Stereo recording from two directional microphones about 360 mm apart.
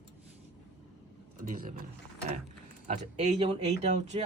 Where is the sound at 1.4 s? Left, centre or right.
Right.